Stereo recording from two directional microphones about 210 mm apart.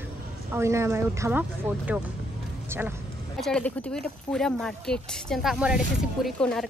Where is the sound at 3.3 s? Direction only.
5° left (ahead or behind).